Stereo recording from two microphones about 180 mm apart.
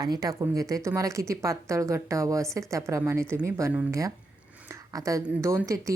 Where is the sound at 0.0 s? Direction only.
20° right (ahead or behind).